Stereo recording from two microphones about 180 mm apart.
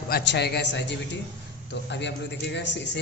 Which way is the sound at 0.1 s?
65° left (ahead or behind).